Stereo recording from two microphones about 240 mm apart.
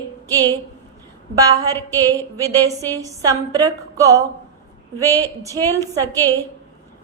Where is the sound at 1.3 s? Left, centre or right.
Centre.